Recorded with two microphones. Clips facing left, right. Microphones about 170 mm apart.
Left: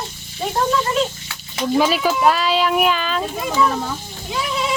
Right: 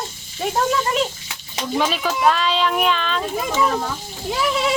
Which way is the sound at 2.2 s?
5° left (ahead or behind).